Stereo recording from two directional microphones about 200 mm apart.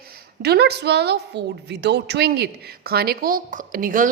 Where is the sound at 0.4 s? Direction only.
55° right (ahead or behind).